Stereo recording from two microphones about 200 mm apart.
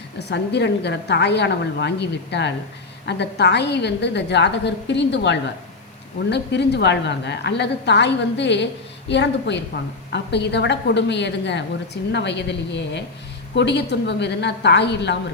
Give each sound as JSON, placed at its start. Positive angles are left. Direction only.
{"t": 0.2, "sound": "a woman's voice", "side_deg": 55}